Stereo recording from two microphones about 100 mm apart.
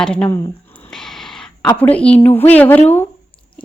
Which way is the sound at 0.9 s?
5° left (ahead or behind).